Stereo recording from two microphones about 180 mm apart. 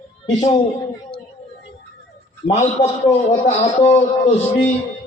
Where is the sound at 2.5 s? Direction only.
40° left (ahead or behind).